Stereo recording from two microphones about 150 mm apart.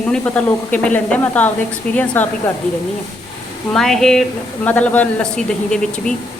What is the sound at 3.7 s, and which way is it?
Speech, centre (ahead or behind).